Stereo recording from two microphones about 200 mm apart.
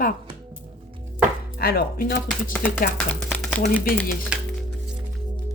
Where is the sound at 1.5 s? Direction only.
50° left (ahead or behind).